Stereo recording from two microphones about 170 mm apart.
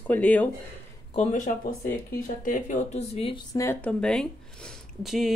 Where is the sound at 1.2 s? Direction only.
45° left (ahead or behind).